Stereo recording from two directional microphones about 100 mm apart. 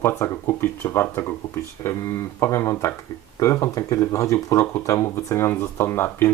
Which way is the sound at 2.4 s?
30° left (ahead or behind).